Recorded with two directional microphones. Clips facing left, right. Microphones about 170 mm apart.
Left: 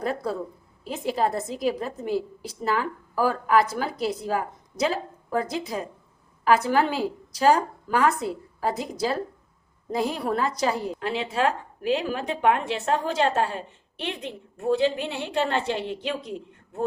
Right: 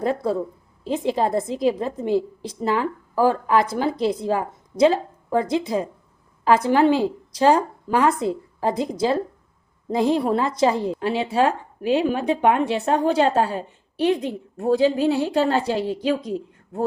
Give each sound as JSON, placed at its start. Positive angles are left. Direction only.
{"t": 0.0, "sound": "a woman's voice", "side_deg": -25}